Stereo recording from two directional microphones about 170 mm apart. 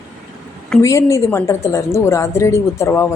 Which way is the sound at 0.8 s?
15° left (ahead or behind).